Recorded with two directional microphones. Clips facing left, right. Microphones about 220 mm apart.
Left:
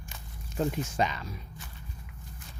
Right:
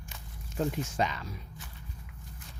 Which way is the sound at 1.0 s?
20° left (ahead or behind).